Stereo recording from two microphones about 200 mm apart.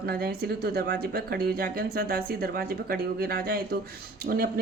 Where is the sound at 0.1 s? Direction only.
50° right (ahead or behind).